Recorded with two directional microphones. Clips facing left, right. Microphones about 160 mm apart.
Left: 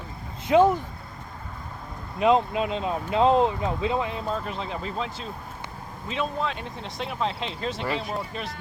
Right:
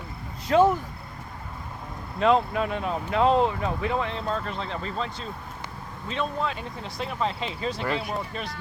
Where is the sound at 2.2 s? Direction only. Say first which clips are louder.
Left 1 dB; 20° left (ahead or behind).